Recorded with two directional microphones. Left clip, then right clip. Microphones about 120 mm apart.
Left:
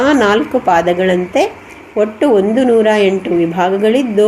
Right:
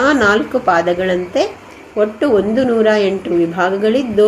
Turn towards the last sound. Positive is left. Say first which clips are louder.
# left 2 dB
turn(degrees=25)  # may be behind; listen again after turning